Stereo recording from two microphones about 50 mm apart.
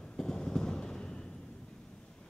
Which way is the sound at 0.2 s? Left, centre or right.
Centre.